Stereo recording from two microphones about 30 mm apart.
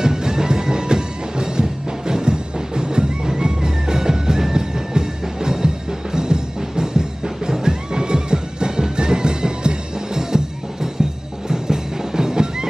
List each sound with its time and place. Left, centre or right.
0.0 s music: right